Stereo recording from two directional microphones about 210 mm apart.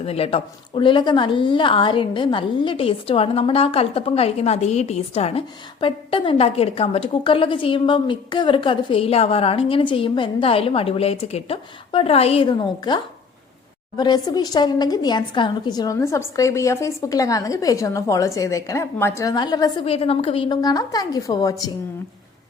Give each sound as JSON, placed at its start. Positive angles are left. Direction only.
{"t": 0.0, "sound": "a woman's voice", "side_deg": 30}